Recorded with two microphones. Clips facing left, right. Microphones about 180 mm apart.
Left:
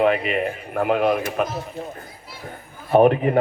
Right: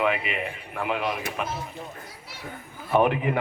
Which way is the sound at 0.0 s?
45° left (ahead or behind).